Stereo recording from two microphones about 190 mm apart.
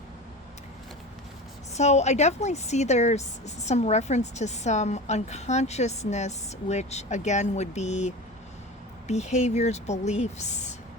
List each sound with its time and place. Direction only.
1.7 s a woman's voice: 35° left (ahead or behind)